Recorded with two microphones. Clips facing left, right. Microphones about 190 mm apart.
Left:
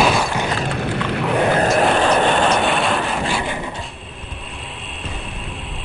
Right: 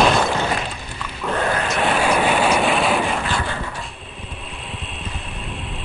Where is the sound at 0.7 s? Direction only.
65° left (ahead or behind).